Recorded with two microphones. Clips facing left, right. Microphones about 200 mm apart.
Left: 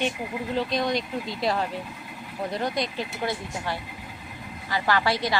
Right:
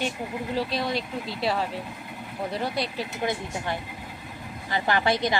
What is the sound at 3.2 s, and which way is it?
Speech, 20° right (ahead or behind).